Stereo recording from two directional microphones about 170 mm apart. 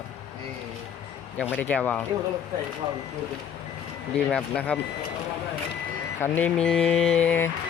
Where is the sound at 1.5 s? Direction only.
10° left (ahead or behind).